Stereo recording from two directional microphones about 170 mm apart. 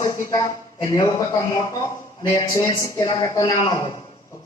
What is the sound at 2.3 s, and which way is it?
A man's voice, 20° left (ahead or behind).